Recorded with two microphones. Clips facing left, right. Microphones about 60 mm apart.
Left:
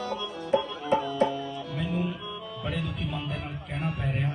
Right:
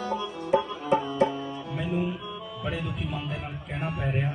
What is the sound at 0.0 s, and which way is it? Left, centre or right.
Music, right.